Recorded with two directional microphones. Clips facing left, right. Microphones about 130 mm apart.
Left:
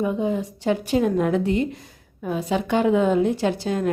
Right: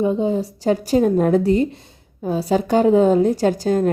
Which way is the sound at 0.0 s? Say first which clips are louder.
Right 4 dB; 30° right (ahead or behind).